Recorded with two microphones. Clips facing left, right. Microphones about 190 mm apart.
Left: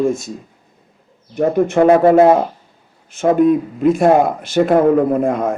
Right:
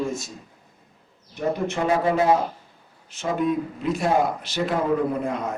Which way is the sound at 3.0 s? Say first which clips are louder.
Left 11 dB; 50° left (ahead or behind).